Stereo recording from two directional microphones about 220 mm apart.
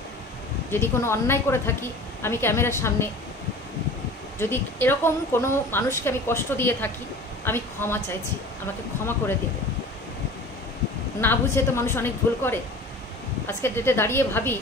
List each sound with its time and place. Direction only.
0.7 s a woman's voice: 10° left (ahead or behind)
4.4 s a woman's voice: 10° left (ahead or behind)
11.1 s a woman's voice: 10° left (ahead or behind)